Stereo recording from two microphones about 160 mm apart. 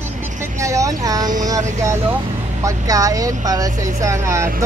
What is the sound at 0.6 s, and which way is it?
Speech, 20° right (ahead or behind).